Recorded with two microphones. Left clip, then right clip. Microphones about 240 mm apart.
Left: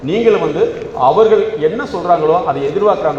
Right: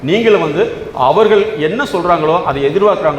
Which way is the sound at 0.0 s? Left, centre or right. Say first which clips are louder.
Right 1 dB; right.